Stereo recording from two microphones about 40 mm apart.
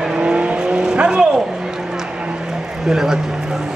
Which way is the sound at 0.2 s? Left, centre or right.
Right.